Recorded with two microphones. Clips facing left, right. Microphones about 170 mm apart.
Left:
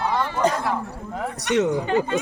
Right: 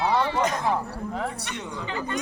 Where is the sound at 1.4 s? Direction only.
90° left.